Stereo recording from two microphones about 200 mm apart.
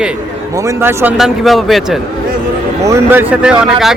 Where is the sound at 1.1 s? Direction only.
Centre (ahead or behind).